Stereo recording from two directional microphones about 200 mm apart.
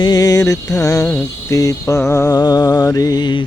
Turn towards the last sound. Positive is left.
turn(degrees=20)  # may be behind; listen again after turning